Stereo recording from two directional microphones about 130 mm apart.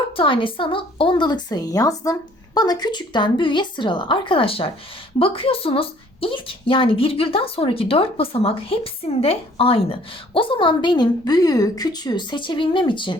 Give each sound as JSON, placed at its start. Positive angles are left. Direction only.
{"t": 0.2, "sound": "a woman's voice", "side_deg": 40}